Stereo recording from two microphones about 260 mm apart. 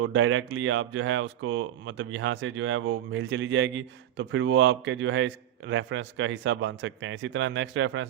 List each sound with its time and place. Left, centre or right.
0.0 s speech: right